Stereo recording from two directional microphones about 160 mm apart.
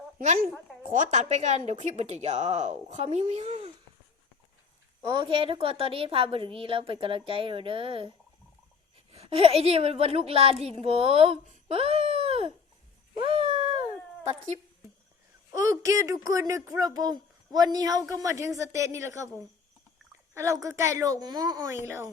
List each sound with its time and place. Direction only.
0.8 s a woman's voice: 50° right (ahead or behind)
5.0 s a woman's voice: 30° right (ahead or behind)
9.1 s a woman's voice: 40° right (ahead or behind)
13.1 s a sound: 35° right (ahead or behind)
15.5 s speech: 20° right (ahead or behind)
20.3 s speech: 20° right (ahead or behind)